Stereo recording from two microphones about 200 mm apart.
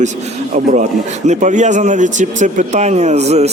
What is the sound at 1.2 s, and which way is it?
Speech, 35° right (ahead or behind).